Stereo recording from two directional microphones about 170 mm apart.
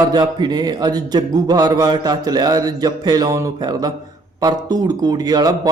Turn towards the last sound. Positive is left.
turn(degrees=-25)  # may be behind; listen again after turning